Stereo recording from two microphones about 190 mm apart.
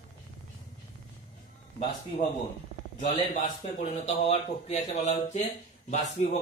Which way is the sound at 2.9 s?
40° left (ahead or behind).